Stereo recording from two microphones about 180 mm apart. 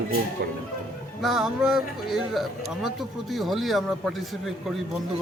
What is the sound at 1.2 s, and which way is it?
Speech, centre (ahead or behind).